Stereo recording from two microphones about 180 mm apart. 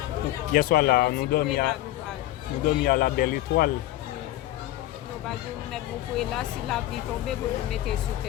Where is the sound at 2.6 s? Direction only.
55° left (ahead or behind).